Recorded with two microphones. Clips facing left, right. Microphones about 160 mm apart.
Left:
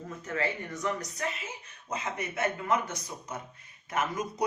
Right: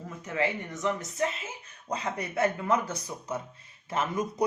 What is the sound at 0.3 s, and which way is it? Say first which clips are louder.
Speech: right 3 dB; 20° right (ahead or behind).